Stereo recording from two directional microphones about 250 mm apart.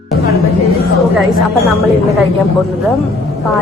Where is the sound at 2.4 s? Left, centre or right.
Centre.